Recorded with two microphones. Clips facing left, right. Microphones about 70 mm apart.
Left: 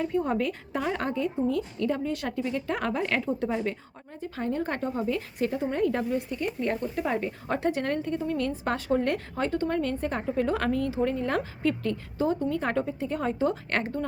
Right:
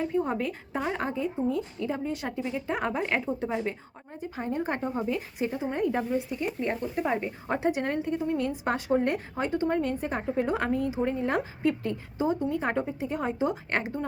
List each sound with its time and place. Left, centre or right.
0.0 s speech: centre
3.2 s speech: centre
4.2 s speech: centre
5.5 s speech: centre